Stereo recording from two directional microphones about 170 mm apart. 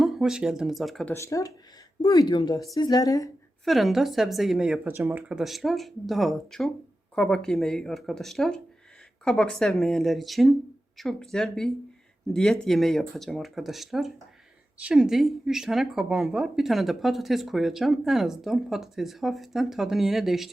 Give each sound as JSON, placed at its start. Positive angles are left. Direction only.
{"t": 0.0, "sound": "speech", "side_deg": 0}
{"t": 1.1, "sound": "speech", "side_deg": 20}
{"t": 3.6, "sound": "speech", "side_deg": 0}